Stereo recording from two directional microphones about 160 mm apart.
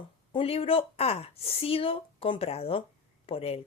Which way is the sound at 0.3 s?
35° left (ahead or behind).